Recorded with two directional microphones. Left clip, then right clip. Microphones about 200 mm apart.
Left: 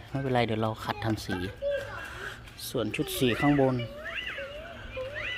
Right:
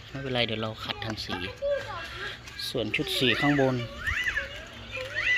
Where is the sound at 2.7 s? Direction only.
10° left (ahead or behind).